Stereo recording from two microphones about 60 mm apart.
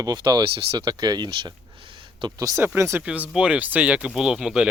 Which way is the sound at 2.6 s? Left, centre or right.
Right.